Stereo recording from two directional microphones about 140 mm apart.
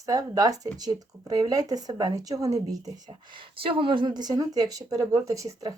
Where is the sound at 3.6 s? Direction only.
40° right (ahead or behind).